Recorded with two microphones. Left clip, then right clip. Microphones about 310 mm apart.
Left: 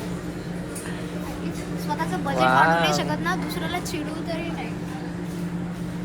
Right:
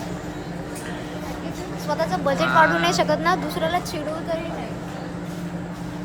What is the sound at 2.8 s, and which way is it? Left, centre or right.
Speech, right.